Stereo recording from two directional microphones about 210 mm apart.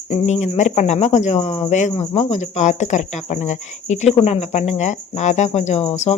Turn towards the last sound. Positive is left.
turn(degrees=30)  # may be behind; listen again after turning